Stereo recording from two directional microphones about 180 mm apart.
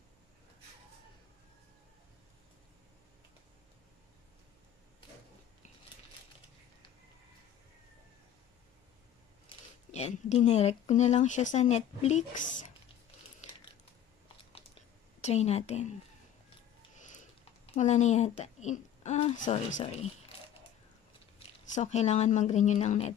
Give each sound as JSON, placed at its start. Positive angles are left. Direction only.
{"t": 9.5, "sound": "speech", "side_deg": 35}
{"t": 15.2, "sound": "speech", "side_deg": 35}
{"t": 17.6, "sound": "speech", "side_deg": 40}
{"t": 21.4, "sound": "speech", "side_deg": 40}